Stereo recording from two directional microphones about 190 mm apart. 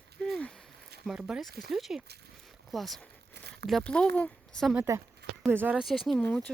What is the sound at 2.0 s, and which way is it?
Speech, 60° right (ahead or behind).